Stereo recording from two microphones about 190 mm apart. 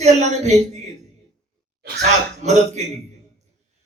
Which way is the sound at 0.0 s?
35° right (ahead or behind).